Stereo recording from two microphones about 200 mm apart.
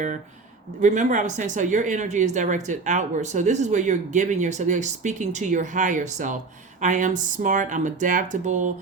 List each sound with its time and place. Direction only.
0.8 s speech: 40° right (ahead or behind)